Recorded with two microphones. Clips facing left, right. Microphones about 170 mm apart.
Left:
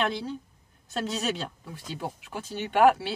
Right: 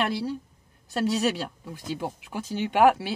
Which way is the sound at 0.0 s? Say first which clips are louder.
Right 2 dB; 5° right (ahead or behind).